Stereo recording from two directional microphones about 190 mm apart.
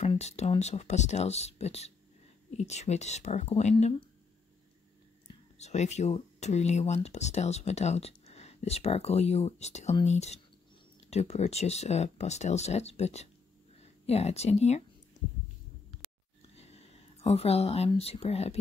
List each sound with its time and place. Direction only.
0.0 s speech: 35° left (ahead or behind)
5.6 s speech: 35° left (ahead or behind)
15.2 s heart sounds: 40° left (ahead or behind)
16.5 s speech: 35° left (ahead or behind)